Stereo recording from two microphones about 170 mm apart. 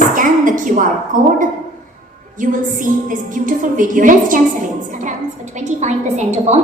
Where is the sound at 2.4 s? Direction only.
50° right (ahead or behind).